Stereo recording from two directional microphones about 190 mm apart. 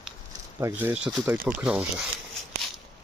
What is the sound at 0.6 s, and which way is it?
Speech, 10° right (ahead or behind).